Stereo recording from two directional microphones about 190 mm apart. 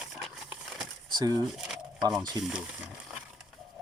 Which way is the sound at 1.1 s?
20° right (ahead or behind).